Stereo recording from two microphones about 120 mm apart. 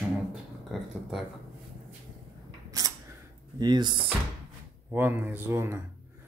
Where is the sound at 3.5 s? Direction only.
40° right (ahead or behind).